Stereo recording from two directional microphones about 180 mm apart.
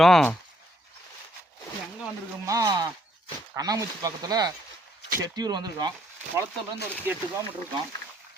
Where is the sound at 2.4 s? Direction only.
20° right (ahead or behind).